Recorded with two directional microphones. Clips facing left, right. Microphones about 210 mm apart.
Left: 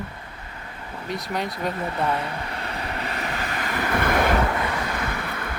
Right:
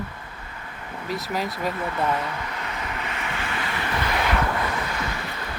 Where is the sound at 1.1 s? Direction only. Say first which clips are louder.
Even; centre (ahead or behind).